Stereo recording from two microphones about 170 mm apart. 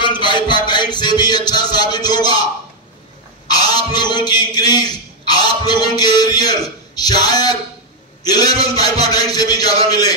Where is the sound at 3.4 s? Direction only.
25° left (ahead or behind).